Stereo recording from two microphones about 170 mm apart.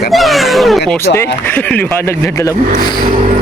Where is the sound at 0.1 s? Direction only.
Centre (ahead or behind).